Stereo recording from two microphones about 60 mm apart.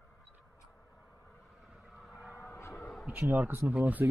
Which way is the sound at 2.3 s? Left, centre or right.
Left.